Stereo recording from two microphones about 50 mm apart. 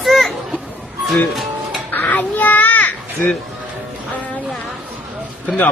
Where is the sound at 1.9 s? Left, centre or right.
Left.